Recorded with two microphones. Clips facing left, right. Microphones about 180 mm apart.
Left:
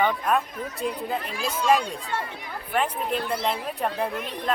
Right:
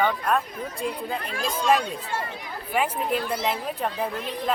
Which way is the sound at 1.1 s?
5° left (ahead or behind).